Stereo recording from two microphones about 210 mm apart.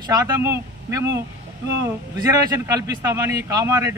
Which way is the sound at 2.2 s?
15° right (ahead or behind).